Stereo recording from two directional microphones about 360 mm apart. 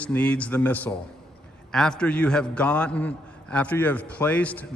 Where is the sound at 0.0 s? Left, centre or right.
Centre.